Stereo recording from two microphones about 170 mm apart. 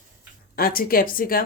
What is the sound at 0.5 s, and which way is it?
Speech, 60° left (ahead or behind).